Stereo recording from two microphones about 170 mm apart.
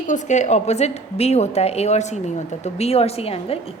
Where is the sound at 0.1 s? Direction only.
45° left (ahead or behind).